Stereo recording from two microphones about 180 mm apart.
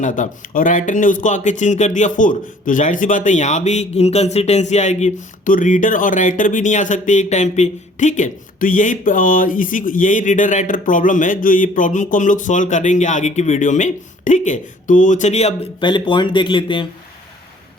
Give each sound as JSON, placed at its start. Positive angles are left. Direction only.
{"t": 0.0, "sound": "speech", "side_deg": 45}
{"t": 15.9, "sound": "speech", "side_deg": 25}